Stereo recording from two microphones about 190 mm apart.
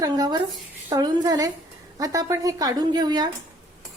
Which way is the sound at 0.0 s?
20° right (ahead or behind).